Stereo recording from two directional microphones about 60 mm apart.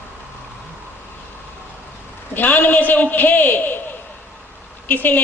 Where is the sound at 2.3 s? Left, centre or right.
Left.